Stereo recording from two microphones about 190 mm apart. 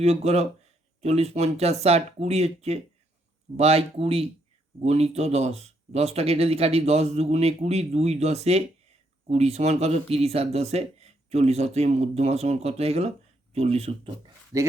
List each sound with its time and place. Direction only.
0.0 s speech: 35° right (ahead or behind)
14.5 s speech: 15° right (ahead or behind)